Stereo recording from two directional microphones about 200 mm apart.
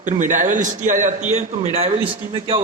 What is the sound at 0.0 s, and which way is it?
A man's voice, 40° right (ahead or behind).